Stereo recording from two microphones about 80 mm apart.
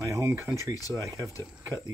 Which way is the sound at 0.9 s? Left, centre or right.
Right.